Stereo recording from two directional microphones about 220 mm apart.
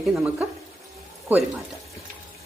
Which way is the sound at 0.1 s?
5° right (ahead or behind).